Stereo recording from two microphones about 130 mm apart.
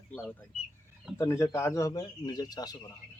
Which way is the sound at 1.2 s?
20° left (ahead or behind).